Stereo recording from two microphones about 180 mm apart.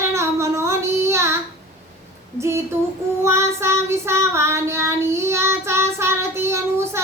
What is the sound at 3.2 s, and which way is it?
Child singing, 15° right (ahead or behind).